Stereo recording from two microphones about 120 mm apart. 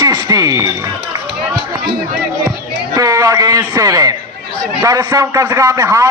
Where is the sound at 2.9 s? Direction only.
30° right (ahead or behind).